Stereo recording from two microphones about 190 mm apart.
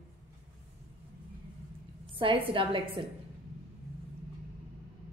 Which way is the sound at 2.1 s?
25° right (ahead or behind).